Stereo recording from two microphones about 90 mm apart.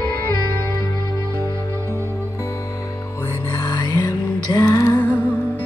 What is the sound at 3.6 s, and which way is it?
Music, 55° left (ahead or behind).